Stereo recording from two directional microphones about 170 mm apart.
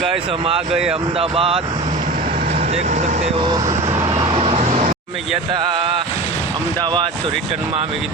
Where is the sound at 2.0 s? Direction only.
50° right (ahead or behind).